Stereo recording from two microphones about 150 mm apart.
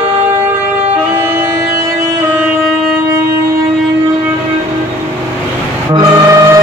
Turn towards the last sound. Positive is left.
turn(degrees=-20)  # may be behind; listen again after turning